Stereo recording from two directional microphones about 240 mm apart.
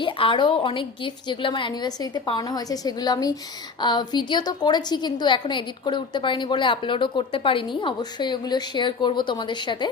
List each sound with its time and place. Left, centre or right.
0.0 s a woman's voice: left